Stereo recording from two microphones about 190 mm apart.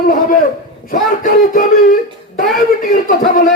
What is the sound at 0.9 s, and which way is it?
Speech, 45° left (ahead or behind).